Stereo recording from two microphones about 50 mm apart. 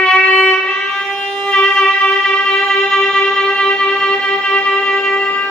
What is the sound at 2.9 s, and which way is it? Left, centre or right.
Music, centre.